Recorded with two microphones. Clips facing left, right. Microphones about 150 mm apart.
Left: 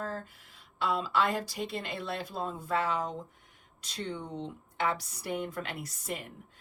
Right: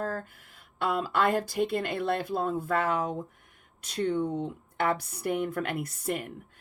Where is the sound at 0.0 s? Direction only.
50° right (ahead or behind).